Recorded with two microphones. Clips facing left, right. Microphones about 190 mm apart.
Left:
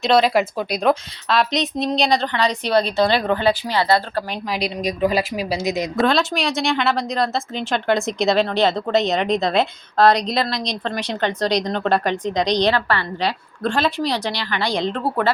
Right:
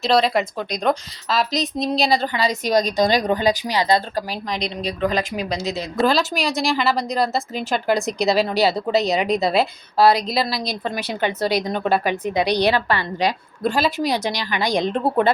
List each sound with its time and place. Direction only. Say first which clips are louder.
0.0 s a woman's voice: left 2 dB; centre (ahead or behind); by 4.2 s 15° right (ahead or behind)
4.3 s speech: left 2 dB; 5° left (ahead or behind)
6.1 s a woman's voice: even; centre (ahead or behind); by 15.3 s 20° right (ahead or behind)